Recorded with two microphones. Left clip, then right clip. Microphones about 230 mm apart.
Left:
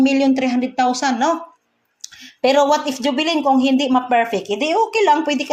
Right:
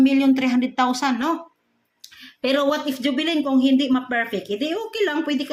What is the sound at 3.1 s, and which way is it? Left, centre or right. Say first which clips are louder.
Speech: left 6 dB; left.